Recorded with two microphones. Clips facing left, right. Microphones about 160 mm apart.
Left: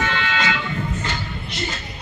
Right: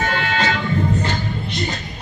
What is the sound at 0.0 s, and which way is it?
Music, 45° right (ahead or behind).